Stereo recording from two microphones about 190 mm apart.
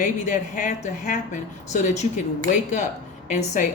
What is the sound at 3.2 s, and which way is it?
Speech, 40° left (ahead or behind).